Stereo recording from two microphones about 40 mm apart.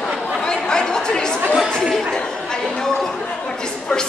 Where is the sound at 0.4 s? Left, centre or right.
Centre.